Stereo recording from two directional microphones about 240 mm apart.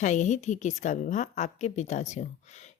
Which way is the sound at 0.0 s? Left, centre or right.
Left.